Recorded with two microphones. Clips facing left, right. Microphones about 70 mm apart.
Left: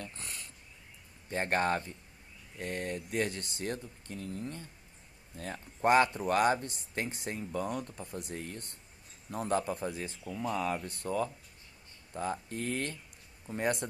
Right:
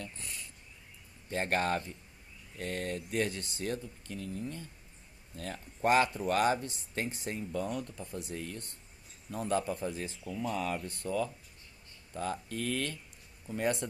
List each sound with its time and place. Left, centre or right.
0.0 s dog: left
1.3 s speech: left